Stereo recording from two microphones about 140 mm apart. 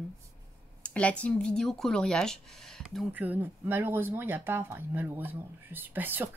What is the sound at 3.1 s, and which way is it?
Speech, 10° right (ahead or behind).